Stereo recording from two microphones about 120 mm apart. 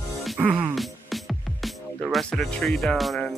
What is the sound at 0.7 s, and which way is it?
Music, centre (ahead or behind).